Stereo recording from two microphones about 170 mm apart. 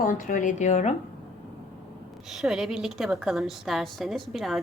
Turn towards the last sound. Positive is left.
turn(degrees=0)  # may be behind; listen again after turning